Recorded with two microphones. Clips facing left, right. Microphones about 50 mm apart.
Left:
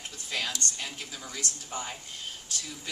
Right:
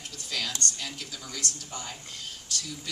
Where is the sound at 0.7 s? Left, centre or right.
Left.